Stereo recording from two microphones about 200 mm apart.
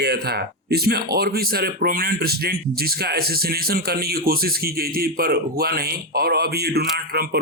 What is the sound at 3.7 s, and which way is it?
Speech, 50° right (ahead or behind).